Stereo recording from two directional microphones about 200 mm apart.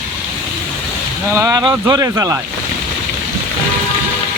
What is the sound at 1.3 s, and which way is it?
Speech, 15° right (ahead or behind).